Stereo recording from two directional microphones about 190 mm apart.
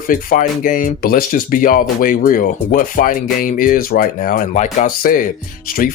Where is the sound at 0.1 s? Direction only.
45° left (ahead or behind).